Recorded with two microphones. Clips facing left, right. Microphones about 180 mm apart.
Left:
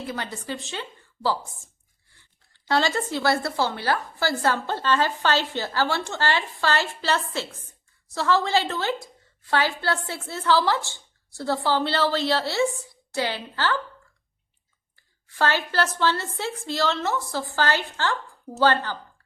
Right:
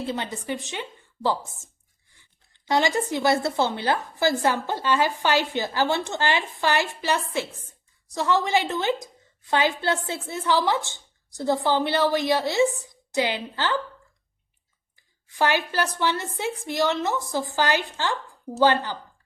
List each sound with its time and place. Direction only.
0.0 s a woman's voice: 25° right (ahead or behind)
14.9 s speech: 15° right (ahead or behind)